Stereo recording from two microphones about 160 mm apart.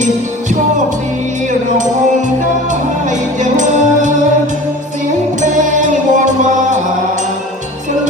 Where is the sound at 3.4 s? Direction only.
50° right (ahead or behind).